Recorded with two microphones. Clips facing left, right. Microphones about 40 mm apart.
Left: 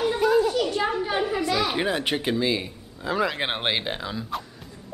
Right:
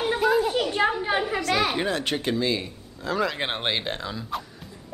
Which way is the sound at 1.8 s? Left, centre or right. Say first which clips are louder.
Left 1 dB; centre.